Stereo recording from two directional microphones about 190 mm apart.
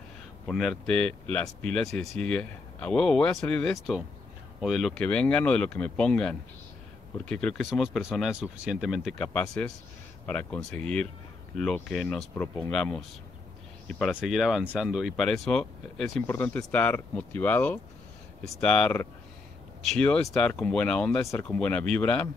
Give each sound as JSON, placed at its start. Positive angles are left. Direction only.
{"t": 0.5, "sound": "speech", "side_deg": 0}